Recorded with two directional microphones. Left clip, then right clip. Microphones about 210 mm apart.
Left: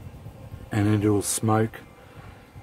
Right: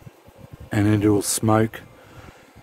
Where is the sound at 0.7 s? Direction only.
45° right (ahead or behind).